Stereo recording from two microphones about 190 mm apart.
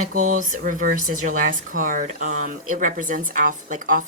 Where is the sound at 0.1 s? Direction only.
45° right (ahead or behind).